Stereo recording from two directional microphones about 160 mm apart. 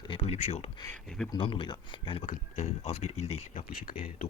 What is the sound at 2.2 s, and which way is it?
Speech, 50° left (ahead or behind).